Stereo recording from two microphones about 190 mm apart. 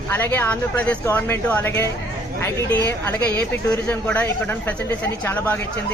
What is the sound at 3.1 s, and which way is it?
Speech, 10° left (ahead or behind).